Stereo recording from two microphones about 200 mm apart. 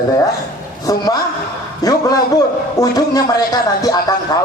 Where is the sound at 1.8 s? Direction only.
15° left (ahead or behind).